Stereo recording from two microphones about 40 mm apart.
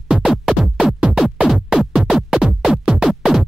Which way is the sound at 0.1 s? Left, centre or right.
Centre.